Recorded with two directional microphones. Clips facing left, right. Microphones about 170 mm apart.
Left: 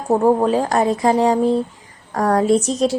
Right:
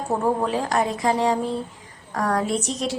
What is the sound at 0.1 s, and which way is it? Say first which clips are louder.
Speech: left 8 dB; 40° left (ahead or behind).